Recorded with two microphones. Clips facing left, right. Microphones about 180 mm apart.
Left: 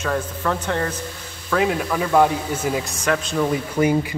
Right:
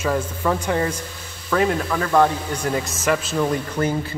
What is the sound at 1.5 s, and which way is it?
Speech, centre (ahead or behind).